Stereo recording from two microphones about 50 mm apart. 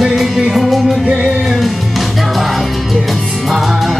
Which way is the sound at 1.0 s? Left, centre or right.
Centre.